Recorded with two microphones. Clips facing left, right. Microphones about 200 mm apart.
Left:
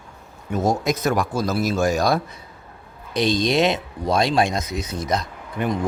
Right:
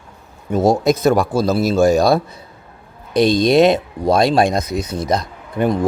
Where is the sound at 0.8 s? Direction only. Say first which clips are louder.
Right 7 dB; 30° right (ahead or behind).